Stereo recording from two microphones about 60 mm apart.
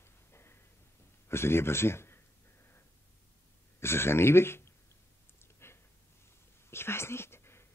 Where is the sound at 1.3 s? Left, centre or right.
Left.